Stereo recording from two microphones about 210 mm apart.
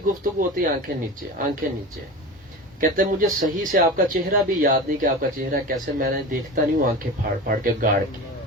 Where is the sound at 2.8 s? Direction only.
40° right (ahead or behind).